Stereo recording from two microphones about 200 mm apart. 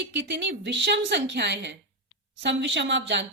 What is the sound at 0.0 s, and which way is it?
A woman's voice, 60° right (ahead or behind).